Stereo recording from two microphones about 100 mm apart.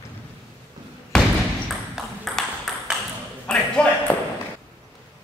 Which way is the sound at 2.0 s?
Centre (ahead or behind).